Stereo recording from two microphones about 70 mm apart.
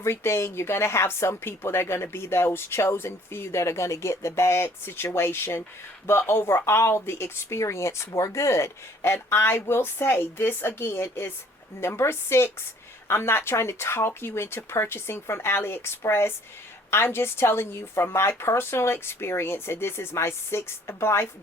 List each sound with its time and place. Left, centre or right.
0.0 s speech: left